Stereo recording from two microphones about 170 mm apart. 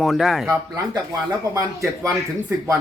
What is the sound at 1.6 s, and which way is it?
Speech, 20° right (ahead or behind).